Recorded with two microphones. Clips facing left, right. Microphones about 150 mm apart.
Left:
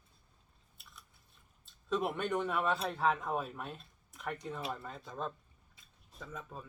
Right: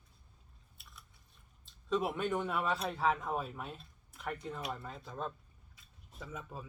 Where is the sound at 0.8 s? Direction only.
Centre (ahead or behind).